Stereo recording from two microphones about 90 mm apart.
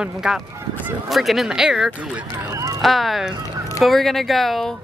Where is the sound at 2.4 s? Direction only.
35° right (ahead or behind).